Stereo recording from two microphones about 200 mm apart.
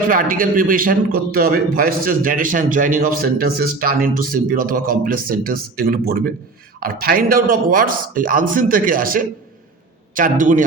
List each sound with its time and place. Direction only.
0.1 s a man's voice: 45° right (ahead or behind)